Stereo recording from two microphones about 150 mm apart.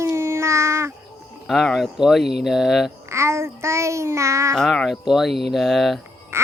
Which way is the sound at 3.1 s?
20° right (ahead or behind).